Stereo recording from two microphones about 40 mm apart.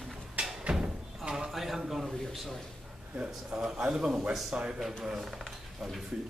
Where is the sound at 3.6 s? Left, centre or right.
Centre.